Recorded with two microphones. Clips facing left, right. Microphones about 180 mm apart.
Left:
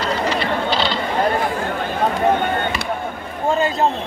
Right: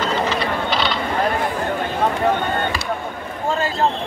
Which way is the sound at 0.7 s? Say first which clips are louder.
Left 1 dB; 30° left (ahead or behind).